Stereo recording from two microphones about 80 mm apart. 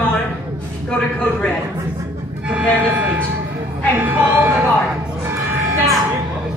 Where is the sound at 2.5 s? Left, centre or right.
Centre.